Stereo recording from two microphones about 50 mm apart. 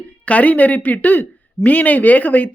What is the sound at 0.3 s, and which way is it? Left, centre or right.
Speech, left.